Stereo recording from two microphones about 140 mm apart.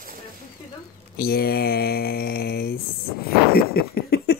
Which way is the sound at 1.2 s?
90° left.